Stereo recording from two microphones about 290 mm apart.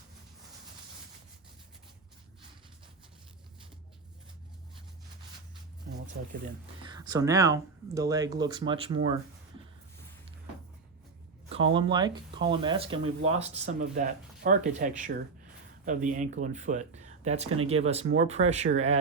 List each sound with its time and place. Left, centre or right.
5.9 s a sound: right
6.8 s speech: centre
11.4 s speech: centre